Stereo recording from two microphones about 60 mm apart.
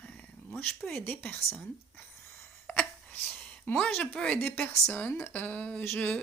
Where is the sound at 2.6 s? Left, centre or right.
Left.